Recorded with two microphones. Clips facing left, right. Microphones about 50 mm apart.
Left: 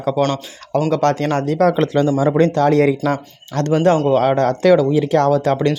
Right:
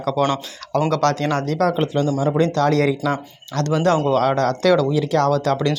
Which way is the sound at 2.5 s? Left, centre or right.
Left.